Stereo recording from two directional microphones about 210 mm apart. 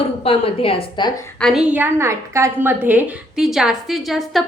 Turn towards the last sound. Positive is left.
turn(degrees=0)  # may be behind; listen again after turning